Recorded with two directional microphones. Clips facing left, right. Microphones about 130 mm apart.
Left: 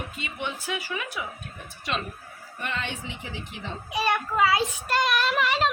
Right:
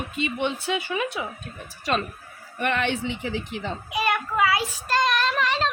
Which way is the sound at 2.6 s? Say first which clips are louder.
Right 8 dB; 65° right (ahead or behind).